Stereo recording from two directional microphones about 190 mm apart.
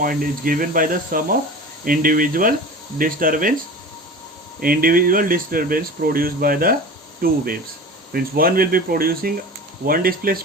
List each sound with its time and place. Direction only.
0.0 s speech: 50° right (ahead or behind)
4.6 s speech: 50° right (ahead or behind)